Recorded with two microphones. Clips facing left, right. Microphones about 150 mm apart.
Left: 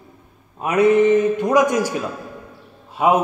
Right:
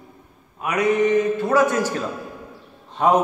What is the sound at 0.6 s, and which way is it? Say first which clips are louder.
Mantra: left 6 dB; 30° left (ahead or behind).